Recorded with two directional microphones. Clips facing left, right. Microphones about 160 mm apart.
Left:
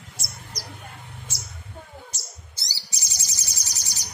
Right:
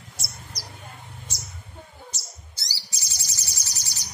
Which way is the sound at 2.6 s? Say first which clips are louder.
Even; 20° left (ahead or behind).